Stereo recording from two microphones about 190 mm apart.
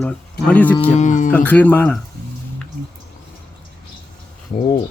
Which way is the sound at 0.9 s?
40° left (ahead or behind).